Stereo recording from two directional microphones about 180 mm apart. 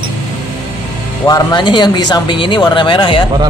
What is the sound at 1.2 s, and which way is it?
Speech, 20° left (ahead or behind).